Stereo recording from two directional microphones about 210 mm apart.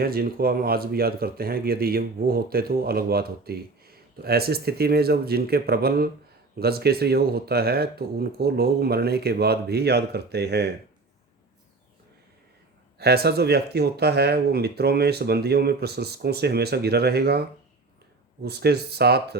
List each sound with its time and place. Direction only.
0.0 s speech: 45° right (ahead or behind)
13.0 s speech: 50° right (ahead or behind)
18.4 s speech: 50° right (ahead or behind)